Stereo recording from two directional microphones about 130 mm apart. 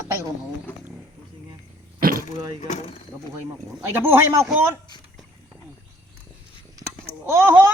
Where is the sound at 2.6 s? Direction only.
60° left (ahead or behind).